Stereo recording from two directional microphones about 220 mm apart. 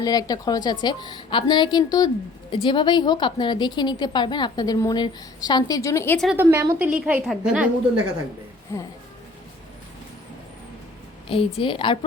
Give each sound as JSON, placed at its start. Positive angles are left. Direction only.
{"t": 0.0, "sound": "a woman's voice", "side_deg": 15}
{"t": 6.1, "sound": "a woman's voice", "side_deg": -5}
{"t": 8.7, "sound": "speech", "side_deg": 10}
{"t": 11.3, "sound": "a woman's voice", "side_deg": 25}